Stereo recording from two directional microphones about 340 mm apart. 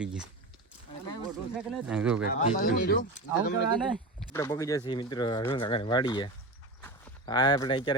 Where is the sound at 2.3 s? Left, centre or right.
Left.